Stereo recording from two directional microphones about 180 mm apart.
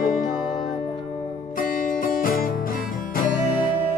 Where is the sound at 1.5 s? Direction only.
50° left (ahead or behind).